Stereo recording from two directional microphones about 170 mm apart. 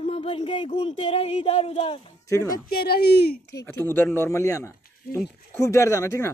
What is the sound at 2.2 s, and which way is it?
Speech, 20° left (ahead or behind).